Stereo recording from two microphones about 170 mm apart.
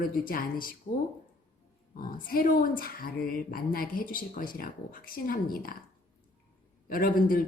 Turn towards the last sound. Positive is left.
turn(degrees=55)  # may be behind; listen again after turning